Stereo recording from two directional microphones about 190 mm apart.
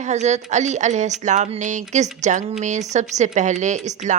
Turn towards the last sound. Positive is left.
turn(degrees=-40)  # may be behind; listen again after turning